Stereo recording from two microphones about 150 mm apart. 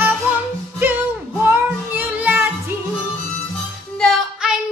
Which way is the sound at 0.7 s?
15° right (ahead or behind).